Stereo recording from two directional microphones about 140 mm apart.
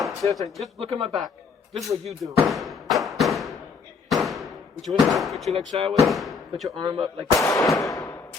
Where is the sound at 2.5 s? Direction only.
Centre (ahead or behind).